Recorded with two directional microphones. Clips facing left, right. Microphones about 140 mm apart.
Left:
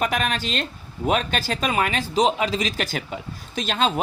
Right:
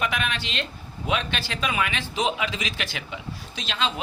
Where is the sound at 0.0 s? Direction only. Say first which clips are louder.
Left 4 dB; 40° left (ahead or behind).